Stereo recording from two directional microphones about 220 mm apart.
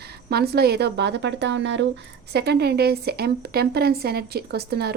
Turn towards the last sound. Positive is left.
turn(degrees=-45)  # may be behind; listen again after turning